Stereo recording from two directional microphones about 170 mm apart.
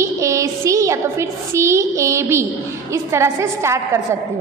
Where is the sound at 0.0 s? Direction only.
20° right (ahead or behind).